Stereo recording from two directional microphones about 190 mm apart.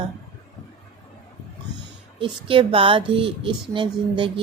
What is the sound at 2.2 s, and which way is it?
Speech, 25° right (ahead or behind).